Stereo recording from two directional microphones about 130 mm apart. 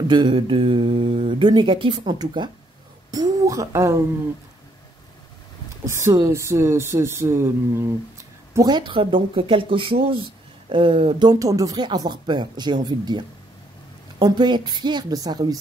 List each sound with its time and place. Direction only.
0.1 s mantra: 40° right (ahead or behind)
1.4 s speech: 35° right (ahead or behind)
6.1 s speech: 25° right (ahead or behind)
8.5 s speech: 35° right (ahead or behind)
14.2 s speech: 35° right (ahead or behind)